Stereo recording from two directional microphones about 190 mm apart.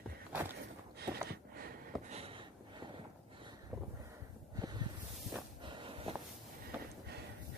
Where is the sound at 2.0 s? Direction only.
30° right (ahead or behind).